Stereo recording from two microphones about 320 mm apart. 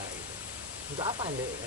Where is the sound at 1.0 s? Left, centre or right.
Centre.